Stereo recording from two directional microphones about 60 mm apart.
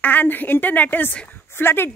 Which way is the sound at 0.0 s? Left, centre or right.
Left.